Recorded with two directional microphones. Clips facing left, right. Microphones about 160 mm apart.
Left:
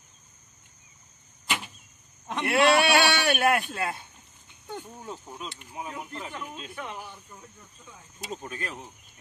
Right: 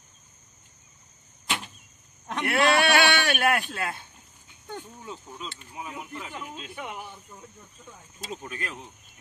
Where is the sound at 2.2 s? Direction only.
Centre (ahead or behind).